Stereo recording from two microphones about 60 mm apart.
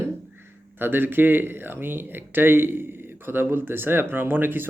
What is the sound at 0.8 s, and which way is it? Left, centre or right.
Speech, right.